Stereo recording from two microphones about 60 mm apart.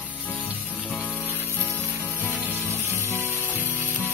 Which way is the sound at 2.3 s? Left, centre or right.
Right.